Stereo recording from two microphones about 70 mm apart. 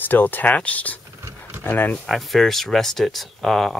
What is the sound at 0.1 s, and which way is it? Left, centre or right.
Speech, left.